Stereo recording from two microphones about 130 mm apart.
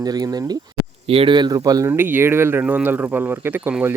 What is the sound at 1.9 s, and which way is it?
Speech, 15° right (ahead or behind).